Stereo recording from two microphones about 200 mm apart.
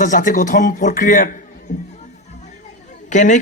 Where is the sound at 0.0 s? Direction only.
40° left (ahead or behind).